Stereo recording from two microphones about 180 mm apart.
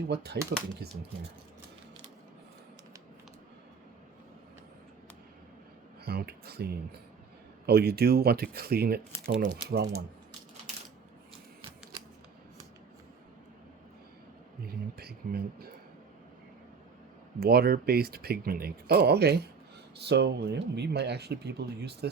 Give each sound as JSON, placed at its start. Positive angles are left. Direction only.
{"t": 0.1, "sound": "speech", "side_deg": -65}
{"t": 6.1, "sound": "speech", "side_deg": -60}
{"t": 14.7, "sound": "speech", "side_deg": -60}
{"t": 17.4, "sound": "speech", "side_deg": -60}